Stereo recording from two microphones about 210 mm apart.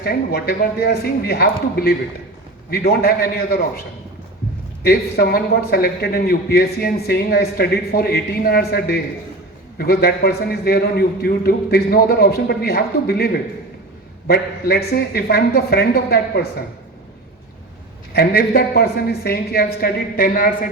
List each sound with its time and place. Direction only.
0.0 s a man's voice: 50° left (ahead or behind)
4.8 s a man's voice: 45° left (ahead or behind)
18.1 s a man's voice: 50° left (ahead or behind)